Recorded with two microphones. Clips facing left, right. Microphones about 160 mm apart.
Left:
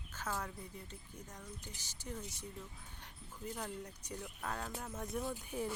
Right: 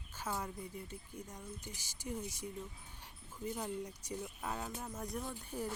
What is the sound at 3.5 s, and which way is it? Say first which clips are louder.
Speech: right 3 dB; 10° right (ahead or behind).